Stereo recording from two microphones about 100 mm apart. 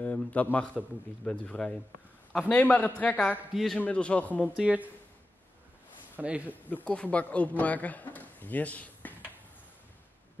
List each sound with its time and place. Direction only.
0.0 s speech: 15° left (ahead or behind)
3.5 s a man's voice: 5° left (ahead or behind)
4.6 s speech: 15° right (ahead or behind)
6.1 s speech: 15° right (ahead or behind)
6.7 s speech: 10° left (ahead or behind)